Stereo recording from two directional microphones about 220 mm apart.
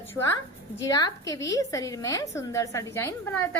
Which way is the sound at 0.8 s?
15° left (ahead or behind).